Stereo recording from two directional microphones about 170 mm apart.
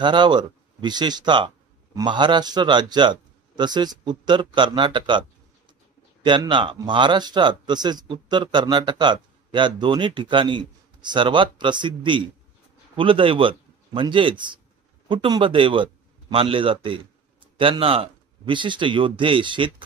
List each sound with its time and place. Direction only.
0.0 s speech: 25° right (ahead or behind)
6.2 s a man's voice: 30° right (ahead or behind)